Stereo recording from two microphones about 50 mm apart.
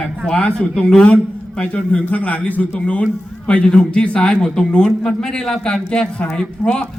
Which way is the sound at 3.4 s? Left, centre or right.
Centre.